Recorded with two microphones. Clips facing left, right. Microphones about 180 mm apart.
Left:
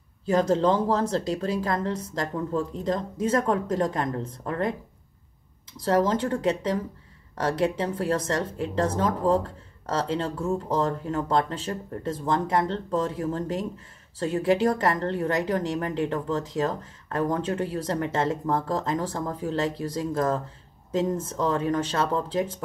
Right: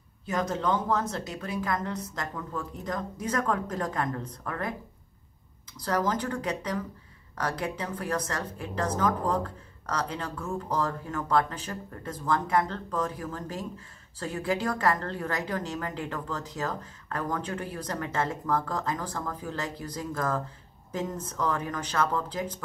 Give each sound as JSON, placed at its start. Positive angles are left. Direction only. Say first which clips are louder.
{"t": 0.3, "sound": "speech", "louder": "left 7 dB", "side_deg": 30}
{"t": 5.8, "sound": "speech", "louder": "left 6 dB", "side_deg": 25}